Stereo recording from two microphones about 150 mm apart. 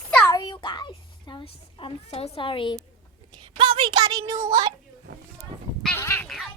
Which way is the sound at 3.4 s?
30° right (ahead or behind).